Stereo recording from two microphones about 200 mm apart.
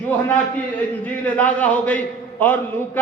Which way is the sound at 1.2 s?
5° left (ahead or behind).